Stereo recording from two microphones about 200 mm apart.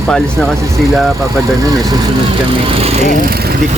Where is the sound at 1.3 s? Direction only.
15° right (ahead or behind).